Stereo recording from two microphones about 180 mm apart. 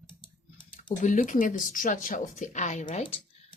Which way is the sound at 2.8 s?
25° left (ahead or behind).